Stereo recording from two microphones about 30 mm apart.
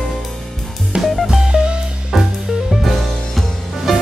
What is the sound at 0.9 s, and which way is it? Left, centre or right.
Music, right.